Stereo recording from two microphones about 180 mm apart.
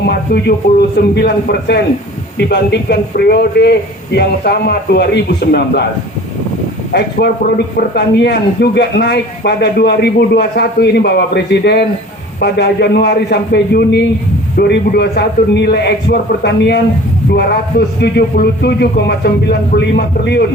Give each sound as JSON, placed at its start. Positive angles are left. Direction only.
{"t": 0.0, "sound": "a man's voice", "side_deg": 65}
{"t": 6.9, "sound": "speech", "side_deg": 55}